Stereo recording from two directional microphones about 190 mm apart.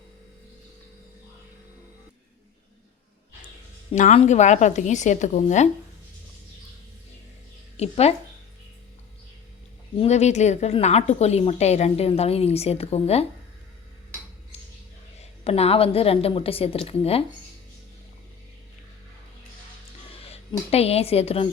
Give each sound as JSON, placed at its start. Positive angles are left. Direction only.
{"t": 3.9, "sound": "a woman's voice", "side_deg": 35}
{"t": 7.8, "sound": "a woman's voice", "side_deg": 35}
{"t": 10.0, "sound": "a woman's voice", "side_deg": 35}
{"t": 15.2, "sound": "a woman's voice", "side_deg": 30}
{"t": 20.3, "sound": "a woman's voice", "side_deg": 30}